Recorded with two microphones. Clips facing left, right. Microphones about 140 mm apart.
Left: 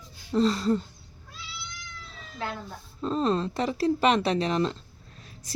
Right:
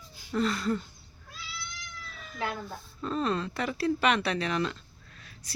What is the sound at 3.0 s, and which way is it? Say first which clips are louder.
Speech: left 4 dB; 30° left (ahead or behind).